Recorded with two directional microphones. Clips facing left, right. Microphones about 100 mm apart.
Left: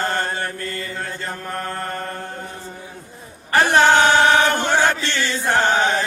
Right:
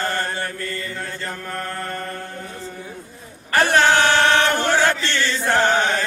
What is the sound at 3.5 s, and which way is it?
Chant, 15° left (ahead or behind).